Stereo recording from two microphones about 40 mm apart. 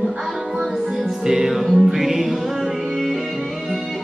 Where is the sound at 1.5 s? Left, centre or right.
Centre.